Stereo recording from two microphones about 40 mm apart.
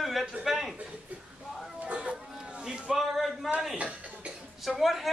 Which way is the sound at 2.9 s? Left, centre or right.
Centre.